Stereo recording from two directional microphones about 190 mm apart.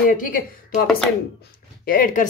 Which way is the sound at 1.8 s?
45° left (ahead or behind).